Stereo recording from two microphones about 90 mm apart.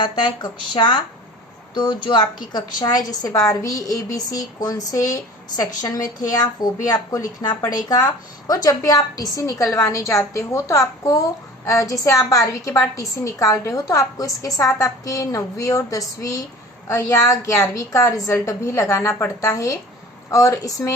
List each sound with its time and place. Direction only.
0.0 s a woman's voice: 60° left (ahead or behind); by 20.9 s 40° left (ahead or behind)